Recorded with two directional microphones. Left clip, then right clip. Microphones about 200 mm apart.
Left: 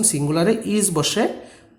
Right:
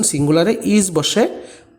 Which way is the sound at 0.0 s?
20° right (ahead or behind).